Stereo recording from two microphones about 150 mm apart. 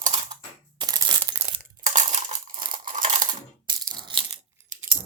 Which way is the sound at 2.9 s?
60° right (ahead or behind).